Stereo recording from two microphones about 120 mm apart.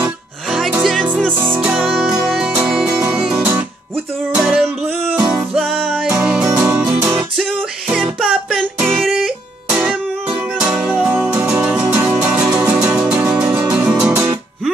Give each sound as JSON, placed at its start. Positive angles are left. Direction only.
{"t": 1.3, "sound": "music", "side_deg": -15}
{"t": 2.9, "sound": "music", "side_deg": -20}
{"t": 6.4, "sound": "music", "side_deg": -20}
{"t": 8.3, "sound": "music", "side_deg": -5}